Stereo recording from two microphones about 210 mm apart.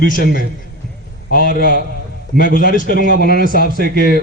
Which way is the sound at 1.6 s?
45° left (ahead or behind).